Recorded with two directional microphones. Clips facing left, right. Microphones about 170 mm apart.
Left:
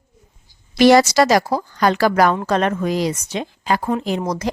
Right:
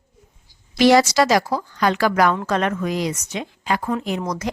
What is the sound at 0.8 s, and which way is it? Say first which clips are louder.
A woman's voice: left 3 dB; 50° left (ahead or behind).